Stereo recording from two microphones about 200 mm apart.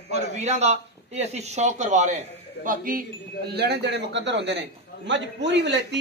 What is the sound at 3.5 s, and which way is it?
A man's voice, 55° right (ahead or behind).